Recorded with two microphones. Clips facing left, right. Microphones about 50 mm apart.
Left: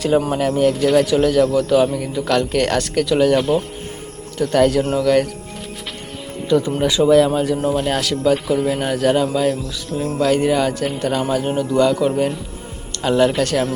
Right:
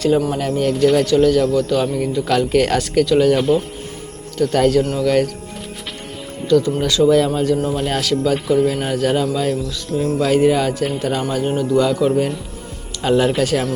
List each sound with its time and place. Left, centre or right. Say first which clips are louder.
0.3 s a man's voice: left 2 dB; centre
6.5 s a man's voice: right 1 dB; centre